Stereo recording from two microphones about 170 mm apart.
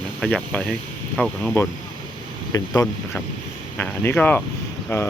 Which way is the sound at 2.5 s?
20° left (ahead or behind).